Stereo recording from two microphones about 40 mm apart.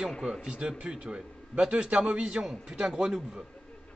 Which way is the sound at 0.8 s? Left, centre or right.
Right.